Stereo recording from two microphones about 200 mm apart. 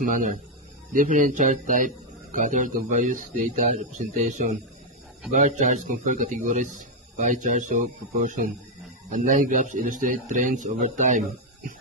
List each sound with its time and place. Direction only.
0.0 s a man's voice: 40° right (ahead or behind)